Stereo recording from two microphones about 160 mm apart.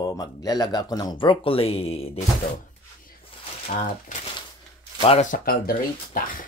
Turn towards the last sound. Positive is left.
turn(degrees=60)  # may be behind; listen again after turning